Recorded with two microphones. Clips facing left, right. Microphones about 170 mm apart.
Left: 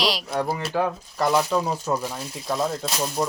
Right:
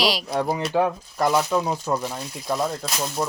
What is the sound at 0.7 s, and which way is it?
Speech, 15° right (ahead or behind).